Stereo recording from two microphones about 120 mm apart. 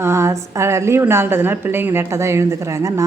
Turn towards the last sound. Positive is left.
turn(degrees=-25)  # may be behind; listen again after turning